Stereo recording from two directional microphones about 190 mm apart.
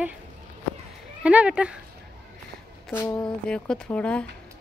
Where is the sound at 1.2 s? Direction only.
5° right (ahead or behind).